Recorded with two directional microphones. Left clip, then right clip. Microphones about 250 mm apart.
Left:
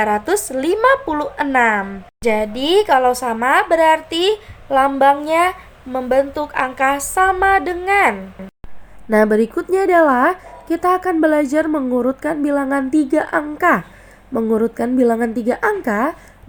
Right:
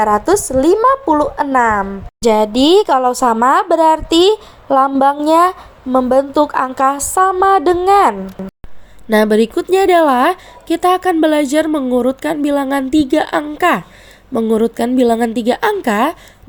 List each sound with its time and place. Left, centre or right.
0.0 s a woman's voice: centre
2.2 s speech: right
9.3 s a woman's voice: right
11.7 s a woman's voice: right
12.2 s a woman's voice: right
14.3 s a woman's voice: right
14.6 s a woman's voice: right